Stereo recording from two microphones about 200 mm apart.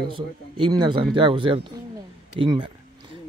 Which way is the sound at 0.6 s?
20° right (ahead or behind).